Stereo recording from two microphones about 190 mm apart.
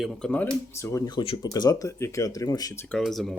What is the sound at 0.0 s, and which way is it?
Speech, centre (ahead or behind).